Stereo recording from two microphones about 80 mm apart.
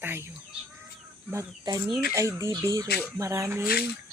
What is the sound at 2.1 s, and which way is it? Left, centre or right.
Speech, right.